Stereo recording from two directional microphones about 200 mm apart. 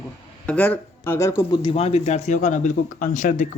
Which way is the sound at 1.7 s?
30° left (ahead or behind).